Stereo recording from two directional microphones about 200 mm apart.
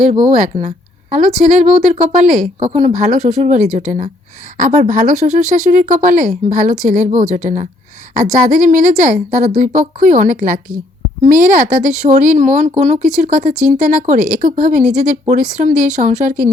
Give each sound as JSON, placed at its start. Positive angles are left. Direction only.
{"t": 0.3, "sound": "speech", "side_deg": -35}